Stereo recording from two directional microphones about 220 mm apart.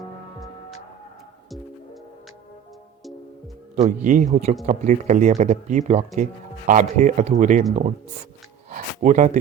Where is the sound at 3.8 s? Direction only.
35° right (ahead or behind).